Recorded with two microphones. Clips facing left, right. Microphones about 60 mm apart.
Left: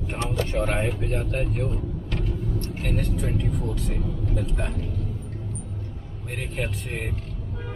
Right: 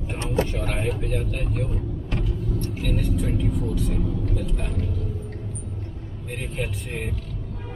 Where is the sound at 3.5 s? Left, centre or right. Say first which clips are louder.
Right 2 dB; centre.